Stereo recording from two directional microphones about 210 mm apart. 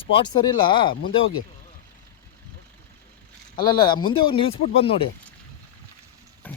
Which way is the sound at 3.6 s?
20° left (ahead or behind).